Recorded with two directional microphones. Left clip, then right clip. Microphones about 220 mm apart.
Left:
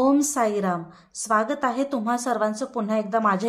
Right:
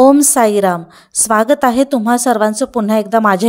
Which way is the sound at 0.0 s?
40° right (ahead or behind).